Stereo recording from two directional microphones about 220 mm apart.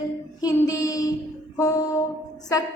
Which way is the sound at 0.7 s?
15° left (ahead or behind).